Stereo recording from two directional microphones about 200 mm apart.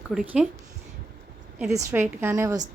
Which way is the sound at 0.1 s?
Centre (ahead or behind).